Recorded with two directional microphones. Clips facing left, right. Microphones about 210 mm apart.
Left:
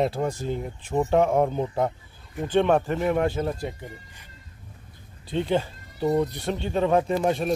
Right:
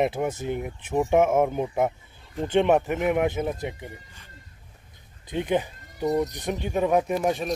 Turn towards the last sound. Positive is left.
turn(degrees=-10)  # may be behind; listen again after turning